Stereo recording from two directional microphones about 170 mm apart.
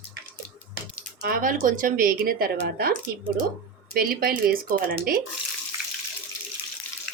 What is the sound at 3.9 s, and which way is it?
Speech, 60° right (ahead or behind).